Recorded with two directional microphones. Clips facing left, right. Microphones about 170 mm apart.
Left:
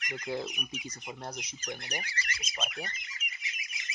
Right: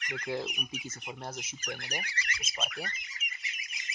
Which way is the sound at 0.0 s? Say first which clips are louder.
Right 1 dB; 10° left (ahead or behind).